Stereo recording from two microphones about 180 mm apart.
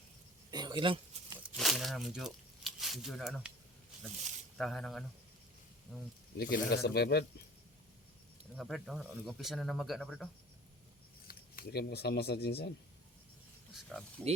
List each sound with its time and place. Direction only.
0.5 s a sound: 25° right (ahead or behind)
1.5 s speech: centre (ahead or behind)
4.5 s speech: centre (ahead or behind)
6.3 s speech: 60° left (ahead or behind)
8.5 s speech: centre (ahead or behind)
11.3 s speech: 55° left (ahead or behind)